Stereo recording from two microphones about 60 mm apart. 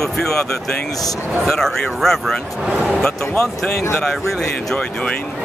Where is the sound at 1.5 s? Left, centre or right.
Centre.